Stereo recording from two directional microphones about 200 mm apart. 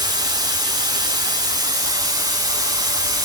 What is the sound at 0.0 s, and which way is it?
Steam, 20° right (ahead or behind).